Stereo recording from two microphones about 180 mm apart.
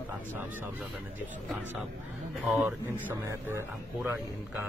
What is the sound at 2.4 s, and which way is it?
Speech, 5° right (ahead or behind).